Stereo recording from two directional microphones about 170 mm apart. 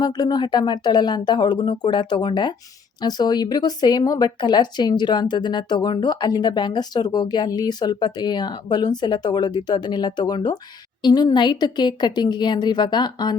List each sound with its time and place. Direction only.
0.0 s speech: 25° left (ahead or behind)